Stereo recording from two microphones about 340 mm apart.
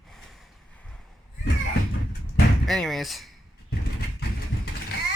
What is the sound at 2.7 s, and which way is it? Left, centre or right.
Speech, centre.